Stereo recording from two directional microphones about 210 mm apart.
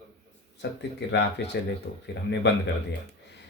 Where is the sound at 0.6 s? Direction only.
55° left (ahead or behind).